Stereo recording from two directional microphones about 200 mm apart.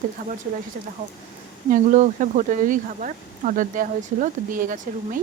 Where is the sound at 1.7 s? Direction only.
40° right (ahead or behind).